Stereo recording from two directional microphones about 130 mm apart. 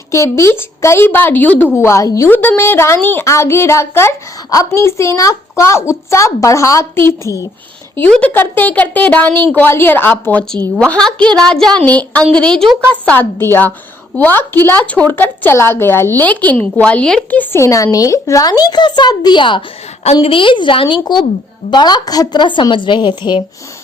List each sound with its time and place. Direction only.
0.1 s a woman's voice: 20° left (ahead or behind)
7.9 s a woman's voice: 10° left (ahead or behind); by 23.4 s 35° left (ahead or behind)